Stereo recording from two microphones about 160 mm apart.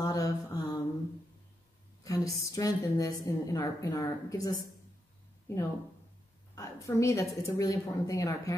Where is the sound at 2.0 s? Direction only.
20° left (ahead or behind).